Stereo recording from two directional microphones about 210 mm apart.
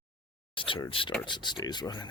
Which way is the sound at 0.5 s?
25° left (ahead or behind).